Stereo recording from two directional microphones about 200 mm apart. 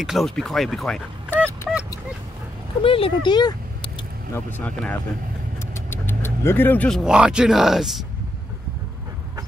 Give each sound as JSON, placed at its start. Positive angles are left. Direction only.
{"t": 0.0, "sound": "speech", "side_deg": 0}
{"t": 2.8, "sound": "vehicle", "side_deg": 25}
{"t": 4.5, "sound": "speech", "side_deg": 10}